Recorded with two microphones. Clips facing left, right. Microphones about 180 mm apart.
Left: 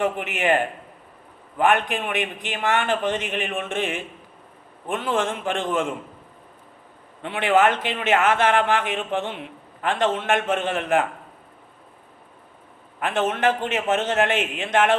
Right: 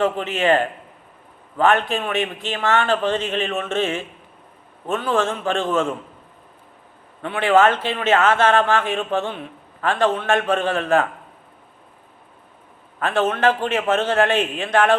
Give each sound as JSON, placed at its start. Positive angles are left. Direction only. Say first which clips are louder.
{"t": 0.0, "sound": "a man's voice", "louder": "right 3 dB", "side_deg": 15}
{"t": 7.2, "sound": "a man's voice", "louder": "right 3 dB", "side_deg": 20}
{"t": 13.0, "sound": "a man's voice", "louder": "right 3 dB", "side_deg": 15}